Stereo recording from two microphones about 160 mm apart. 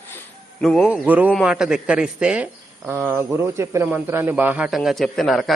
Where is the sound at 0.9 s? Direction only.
10° right (ahead or behind).